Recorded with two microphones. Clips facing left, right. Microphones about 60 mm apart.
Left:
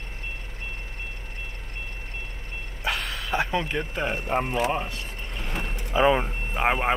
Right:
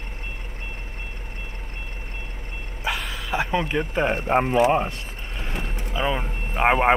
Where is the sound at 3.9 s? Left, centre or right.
Right.